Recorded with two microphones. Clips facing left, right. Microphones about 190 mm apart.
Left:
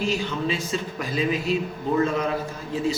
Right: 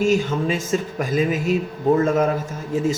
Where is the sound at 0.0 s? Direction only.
45° right (ahead or behind).